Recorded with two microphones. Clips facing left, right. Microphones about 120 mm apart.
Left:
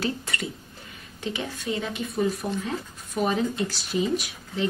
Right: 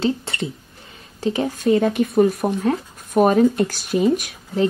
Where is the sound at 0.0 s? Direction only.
25° right (ahead or behind).